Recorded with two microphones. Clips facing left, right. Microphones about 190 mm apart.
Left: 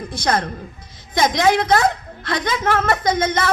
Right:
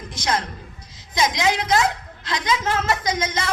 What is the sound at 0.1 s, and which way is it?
A woman's voice, 60° left (ahead or behind).